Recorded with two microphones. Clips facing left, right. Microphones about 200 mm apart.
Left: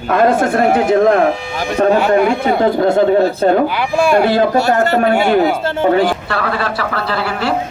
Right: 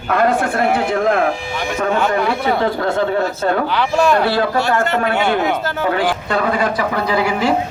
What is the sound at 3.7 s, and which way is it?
Speech, 10° left (ahead or behind).